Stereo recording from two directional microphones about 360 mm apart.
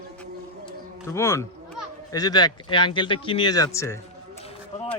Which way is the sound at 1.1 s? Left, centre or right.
Centre.